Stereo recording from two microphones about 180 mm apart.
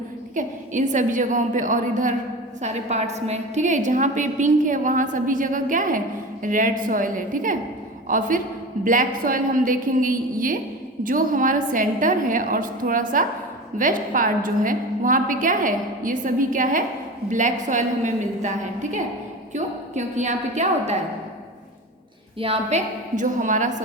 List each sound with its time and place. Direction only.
0.3 s a woman's voice: 45° right (ahead or behind)
22.4 s a woman's voice: 35° right (ahead or behind)